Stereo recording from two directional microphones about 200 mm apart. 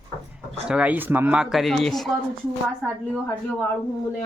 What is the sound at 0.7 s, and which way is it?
Speech, 5° right (ahead or behind).